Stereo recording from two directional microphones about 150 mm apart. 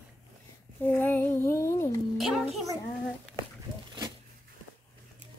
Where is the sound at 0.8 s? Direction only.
15° left (ahead or behind).